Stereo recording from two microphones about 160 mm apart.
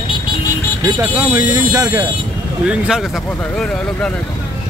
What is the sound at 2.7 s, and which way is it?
Speech, 5° right (ahead or behind).